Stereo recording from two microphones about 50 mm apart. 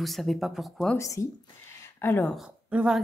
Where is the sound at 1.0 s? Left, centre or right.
Left.